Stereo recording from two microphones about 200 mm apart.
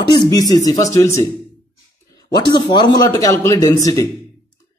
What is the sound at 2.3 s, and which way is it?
A man's voice, 20° left (ahead or behind).